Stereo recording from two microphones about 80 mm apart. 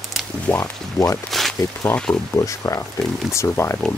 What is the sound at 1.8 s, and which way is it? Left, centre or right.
Speech, centre.